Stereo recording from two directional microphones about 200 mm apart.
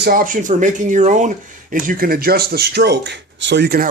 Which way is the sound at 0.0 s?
45° right (ahead or behind).